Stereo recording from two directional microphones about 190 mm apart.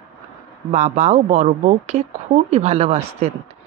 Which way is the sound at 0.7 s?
35° right (ahead or behind).